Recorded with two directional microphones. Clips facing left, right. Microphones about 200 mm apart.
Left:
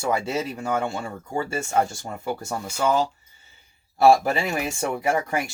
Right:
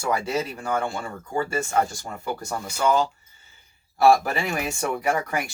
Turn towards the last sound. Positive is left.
turn(degrees=25)  # may be behind; listen again after turning